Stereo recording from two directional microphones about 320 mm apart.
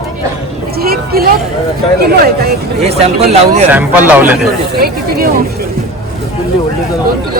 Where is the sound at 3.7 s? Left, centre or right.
Centre.